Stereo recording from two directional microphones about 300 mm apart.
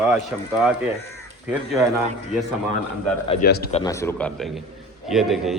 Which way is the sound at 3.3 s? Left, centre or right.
Left.